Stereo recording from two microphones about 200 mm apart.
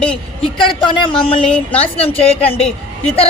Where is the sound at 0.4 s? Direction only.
25° left (ahead or behind).